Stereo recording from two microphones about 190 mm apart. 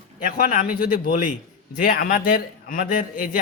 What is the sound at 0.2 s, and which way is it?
A man's voice, 45° left (ahead or behind).